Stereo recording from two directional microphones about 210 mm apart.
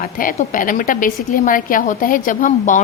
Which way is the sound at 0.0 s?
40° left (ahead or behind).